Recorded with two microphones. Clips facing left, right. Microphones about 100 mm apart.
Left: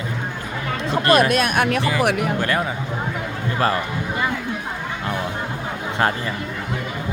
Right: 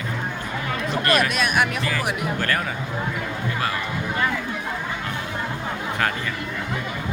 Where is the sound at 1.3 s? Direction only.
50° left (ahead or behind).